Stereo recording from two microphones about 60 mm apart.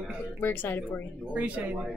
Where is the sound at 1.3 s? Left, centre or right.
Right.